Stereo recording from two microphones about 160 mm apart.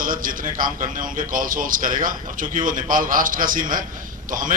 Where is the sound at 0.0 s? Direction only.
60° right (ahead or behind).